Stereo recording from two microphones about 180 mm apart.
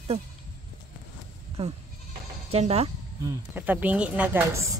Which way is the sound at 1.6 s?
35° right (ahead or behind).